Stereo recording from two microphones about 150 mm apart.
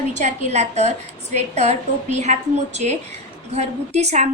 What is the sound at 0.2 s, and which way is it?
A woman's voice, 50° right (ahead or behind).